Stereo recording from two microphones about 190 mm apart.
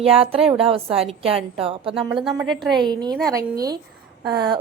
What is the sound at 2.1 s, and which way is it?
Speech, centre (ahead or behind).